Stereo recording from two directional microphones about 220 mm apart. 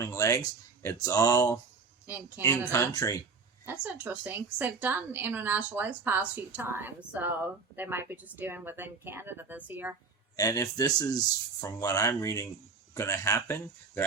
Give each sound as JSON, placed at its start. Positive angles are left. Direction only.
{"t": 0.0, "sound": "speech", "side_deg": 15}
{"t": 2.0, "sound": "a woman's voice", "side_deg": -10}
{"t": 2.7, "sound": "speech", "side_deg": 15}
{"t": 3.7, "sound": "a woman's voice", "side_deg": -5}
{"t": 10.3, "sound": "speech", "side_deg": 15}